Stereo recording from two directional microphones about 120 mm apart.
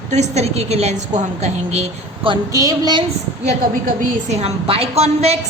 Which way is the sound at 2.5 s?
30° right (ahead or behind).